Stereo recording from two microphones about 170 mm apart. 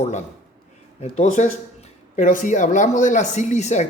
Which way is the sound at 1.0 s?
40° left (ahead or behind).